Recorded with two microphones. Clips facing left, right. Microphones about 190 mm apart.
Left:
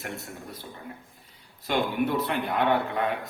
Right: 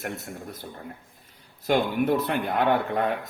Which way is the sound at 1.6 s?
45° right (ahead or behind).